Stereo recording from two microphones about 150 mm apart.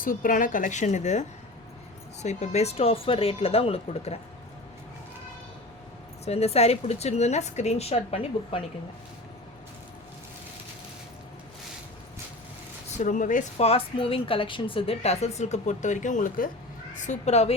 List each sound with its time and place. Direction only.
0.0 s a woman's voice: 65° left (ahead or behind)
2.2 s speech: 50° left (ahead or behind)
6.2 s speech: 45° left (ahead or behind)
13.0 s a woman's voice: 60° left (ahead or behind)
13.7 s speech: 40° left (ahead or behind); by 16.5 s 60° left (ahead or behind)
16.9 s speech: 50° left (ahead or behind)